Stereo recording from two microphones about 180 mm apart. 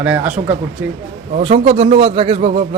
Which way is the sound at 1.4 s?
35° right (ahead or behind).